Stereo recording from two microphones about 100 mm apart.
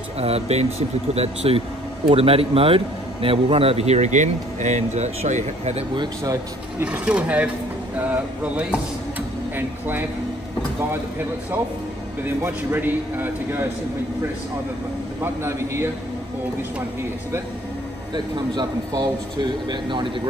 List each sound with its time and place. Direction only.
0.2 s speech: 90° right
2.0 s speech: 75° right (ahead or behind); by 4.0 s 90° right
5.2 s speech: 90° right
5.9 s speech: 35° right (ahead or behind)
6.8 s speech: 15° right (ahead or behind)
15.4 s speech: 25° right (ahead or behind)
18.1 s speech: 45° right (ahead or behind)